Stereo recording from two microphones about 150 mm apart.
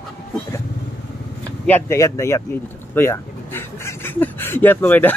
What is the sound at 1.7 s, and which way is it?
Speech, 20° left (ahead or behind).